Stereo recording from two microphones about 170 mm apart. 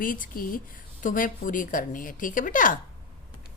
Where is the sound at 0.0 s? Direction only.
55° left (ahead or behind).